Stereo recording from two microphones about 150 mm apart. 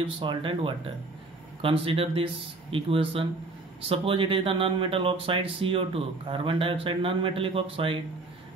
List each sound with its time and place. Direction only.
0.0 s speech: 35° right (ahead or behind)